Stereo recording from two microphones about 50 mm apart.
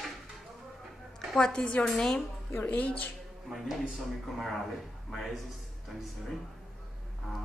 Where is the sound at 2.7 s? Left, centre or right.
Left.